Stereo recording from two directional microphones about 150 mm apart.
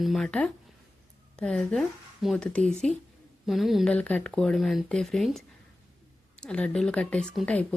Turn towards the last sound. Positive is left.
turn(degrees=5)  # may be behind; listen again after turning